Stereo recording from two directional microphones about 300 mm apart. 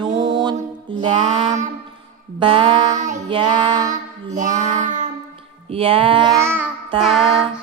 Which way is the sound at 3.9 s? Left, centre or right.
Right.